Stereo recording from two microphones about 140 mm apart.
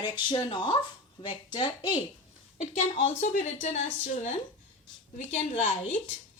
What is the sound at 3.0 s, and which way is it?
A woman's voice, 60° left (ahead or behind).